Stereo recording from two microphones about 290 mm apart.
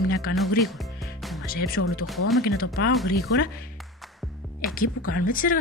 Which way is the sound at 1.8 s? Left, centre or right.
Left.